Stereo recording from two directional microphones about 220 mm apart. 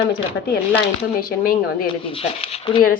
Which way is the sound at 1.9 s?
25° left (ahead or behind).